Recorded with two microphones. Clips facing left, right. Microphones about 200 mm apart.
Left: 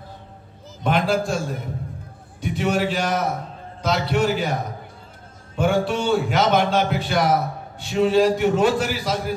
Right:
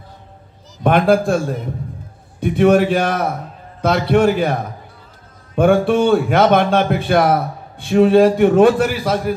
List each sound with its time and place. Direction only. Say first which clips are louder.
0.8 s a man's voice: right 7 dB; 55° right (ahead or behind)
2.4 s a man's voice: right 9 dB; 55° right (ahead or behind)
5.6 s a man's voice: right 8 dB; 55° right (ahead or behind)